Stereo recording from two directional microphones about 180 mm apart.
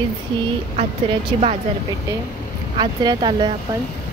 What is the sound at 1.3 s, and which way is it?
Speech, 30° right (ahead or behind).